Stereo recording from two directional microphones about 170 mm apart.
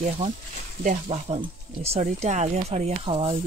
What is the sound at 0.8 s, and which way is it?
Speech, 40° right (ahead or behind).